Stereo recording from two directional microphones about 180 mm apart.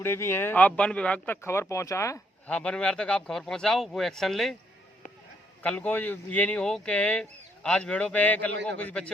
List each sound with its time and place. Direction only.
0.0 s speech: 15° left (ahead or behind)
2.6 s speech: 5° left (ahead or behind)
5.6 s speech: 5° left (ahead or behind)